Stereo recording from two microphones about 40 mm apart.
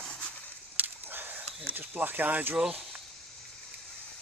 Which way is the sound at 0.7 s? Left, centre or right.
Right.